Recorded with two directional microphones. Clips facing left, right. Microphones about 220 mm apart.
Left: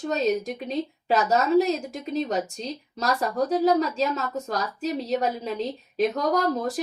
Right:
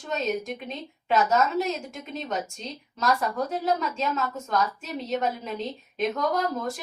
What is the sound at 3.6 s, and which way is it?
A woman's voice, 35° left (ahead or behind).